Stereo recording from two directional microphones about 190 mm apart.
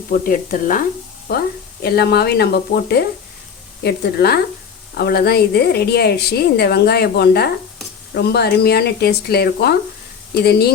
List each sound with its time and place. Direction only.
0.1 s a woman's voice: 45° left (ahead or behind)